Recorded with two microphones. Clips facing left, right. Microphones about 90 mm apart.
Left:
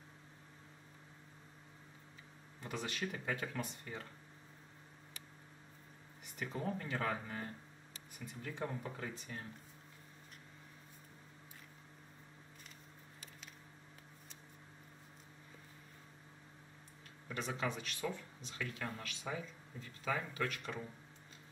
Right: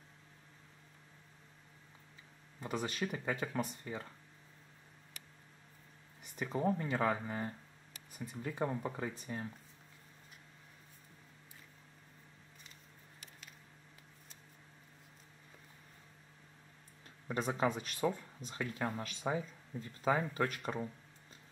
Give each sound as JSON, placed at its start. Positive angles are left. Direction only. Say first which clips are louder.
{"t": 2.6, "sound": "speech", "louder": "right 4 dB", "side_deg": -35}
{"t": 3.1, "sound": "speech", "louder": "right 3 dB", "side_deg": -25}
{"t": 6.4, "sound": "speech", "louder": "right 6 dB", "side_deg": -25}
{"t": 17.3, "sound": "speech", "louder": "right 6 dB", "side_deg": -35}